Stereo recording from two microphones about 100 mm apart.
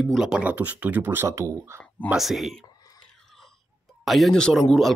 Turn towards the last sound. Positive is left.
turn(degrees=5)  # may be behind; listen again after turning